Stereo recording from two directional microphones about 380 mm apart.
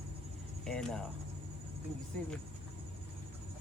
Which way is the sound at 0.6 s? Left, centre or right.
Centre.